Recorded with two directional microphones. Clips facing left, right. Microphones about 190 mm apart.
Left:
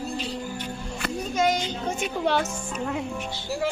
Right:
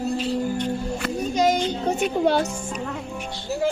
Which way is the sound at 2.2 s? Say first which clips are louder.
Right 3 dB; 40° right (ahead or behind).